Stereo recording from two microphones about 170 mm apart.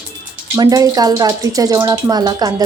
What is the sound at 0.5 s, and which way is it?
Speech, 25° right (ahead or behind).